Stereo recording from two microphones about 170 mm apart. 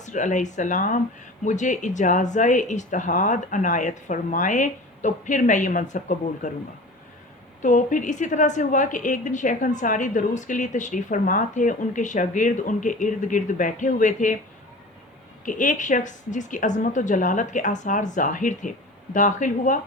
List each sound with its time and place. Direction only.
0.0 s a woman's voice: 45° left (ahead or behind)
7.6 s a woman's voice: 45° left (ahead or behind)
15.4 s a woman's voice: 50° left (ahead or behind)